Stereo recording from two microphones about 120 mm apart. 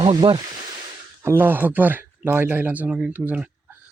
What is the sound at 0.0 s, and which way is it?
Speech, 45° right (ahead or behind).